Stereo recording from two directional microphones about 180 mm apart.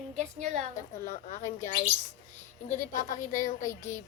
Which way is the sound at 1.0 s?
45° left (ahead or behind).